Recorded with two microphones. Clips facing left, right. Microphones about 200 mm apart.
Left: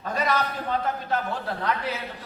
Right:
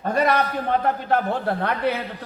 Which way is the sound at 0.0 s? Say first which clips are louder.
Right 5 dB; 55° right (ahead or behind).